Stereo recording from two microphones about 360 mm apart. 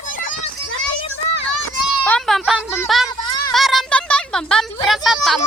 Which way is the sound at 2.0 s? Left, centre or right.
Centre.